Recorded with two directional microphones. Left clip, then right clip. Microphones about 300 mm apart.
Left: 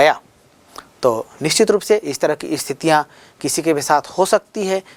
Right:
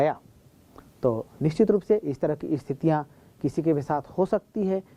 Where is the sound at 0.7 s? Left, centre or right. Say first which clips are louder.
Left 9 dB; centre.